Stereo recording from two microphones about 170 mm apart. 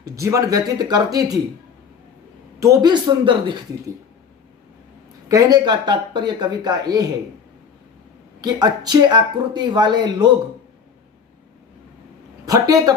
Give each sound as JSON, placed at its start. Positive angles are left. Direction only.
{"t": 0.0, "sound": "speech", "side_deg": -20}
{"t": 2.6, "sound": "speech", "side_deg": -20}
{"t": 5.3, "sound": "speech", "side_deg": -20}
{"t": 8.4, "sound": "speech", "side_deg": -25}
{"t": 12.5, "sound": "speech", "side_deg": -20}